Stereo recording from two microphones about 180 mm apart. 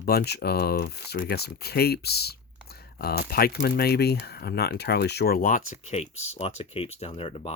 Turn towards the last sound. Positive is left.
turn(degrees=30)  # may be behind; listen again after turning